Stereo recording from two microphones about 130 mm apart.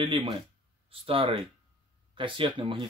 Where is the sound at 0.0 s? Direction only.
40° right (ahead or behind).